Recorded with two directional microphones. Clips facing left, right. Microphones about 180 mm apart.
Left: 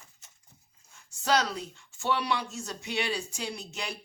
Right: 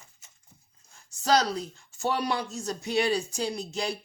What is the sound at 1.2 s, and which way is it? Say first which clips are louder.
Speech: right 3 dB; 35° right (ahead or behind).